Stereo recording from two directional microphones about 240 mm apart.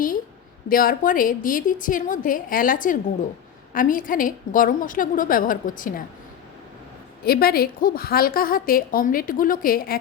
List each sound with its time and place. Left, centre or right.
0.7 s a woman's voice: left
7.3 s a woman's voice: left